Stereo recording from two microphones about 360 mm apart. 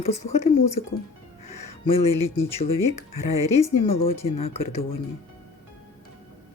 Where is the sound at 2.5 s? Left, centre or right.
Centre.